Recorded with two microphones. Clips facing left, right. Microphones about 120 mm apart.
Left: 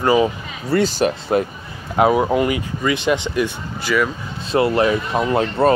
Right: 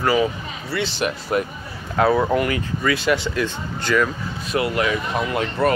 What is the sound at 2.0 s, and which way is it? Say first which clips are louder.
Speech: left 2 dB; 15° left (ahead or behind).